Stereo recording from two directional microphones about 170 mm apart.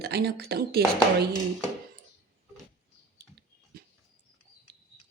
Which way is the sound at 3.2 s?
65° right (ahead or behind).